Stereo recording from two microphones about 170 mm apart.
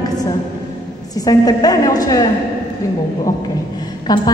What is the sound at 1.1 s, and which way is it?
A woman's voice, 20° left (ahead or behind).